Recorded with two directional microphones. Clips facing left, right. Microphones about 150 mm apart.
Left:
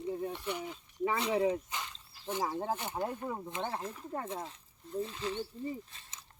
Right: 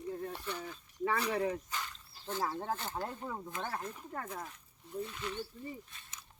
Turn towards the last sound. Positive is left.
turn(degrees=25)  # may be behind; listen again after turning